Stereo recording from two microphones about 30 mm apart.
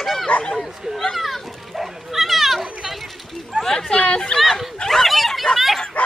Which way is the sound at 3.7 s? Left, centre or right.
Centre.